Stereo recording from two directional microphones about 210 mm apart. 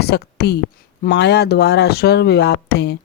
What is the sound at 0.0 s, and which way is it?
Speech, 50° left (ahead or behind).